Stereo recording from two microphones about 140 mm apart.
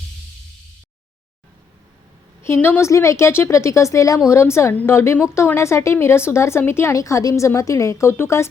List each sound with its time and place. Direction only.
2.4 s a woman's voice: 15° left (ahead or behind)